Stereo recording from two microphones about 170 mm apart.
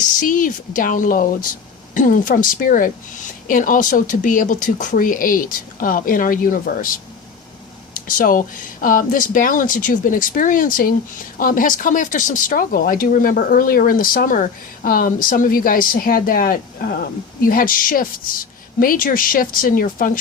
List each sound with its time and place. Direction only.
0.2 s speech: 50° left (ahead or behind)